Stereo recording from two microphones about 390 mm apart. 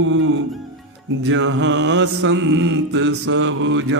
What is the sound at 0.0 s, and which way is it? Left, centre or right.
Mantra, right.